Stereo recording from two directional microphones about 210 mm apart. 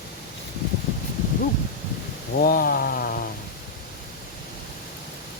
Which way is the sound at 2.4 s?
45° left (ahead or behind).